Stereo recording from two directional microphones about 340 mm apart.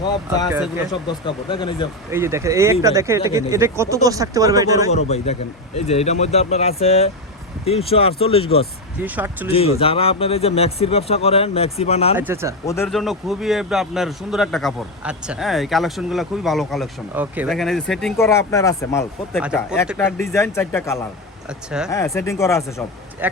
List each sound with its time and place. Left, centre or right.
0.0 s speech: centre
0.5 s speech: centre
0.9 s speech: centre
2.0 s speech: centre
4.9 s speech: centre
9.0 s speech: centre
9.5 s speech: centre
12.1 s speech: centre
12.6 s speech: centre
19.9 s speech: centre
23.2 s speech: centre